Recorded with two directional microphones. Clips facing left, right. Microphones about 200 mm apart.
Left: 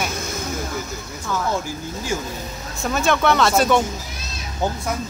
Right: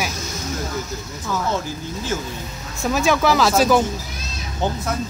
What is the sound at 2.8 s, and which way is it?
Speech, 5° right (ahead or behind).